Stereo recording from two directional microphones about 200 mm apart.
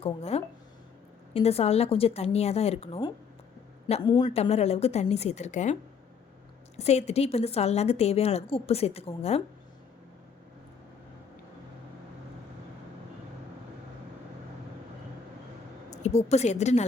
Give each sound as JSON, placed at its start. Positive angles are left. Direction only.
{"t": 0.0, "sound": "a woman's voice", "side_deg": 30}
{"t": 6.7, "sound": "a woman's voice", "side_deg": 30}
{"t": 15.9, "sound": "a woman's voice", "side_deg": 35}